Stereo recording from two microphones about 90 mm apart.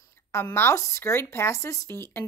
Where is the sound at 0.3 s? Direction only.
25° left (ahead or behind).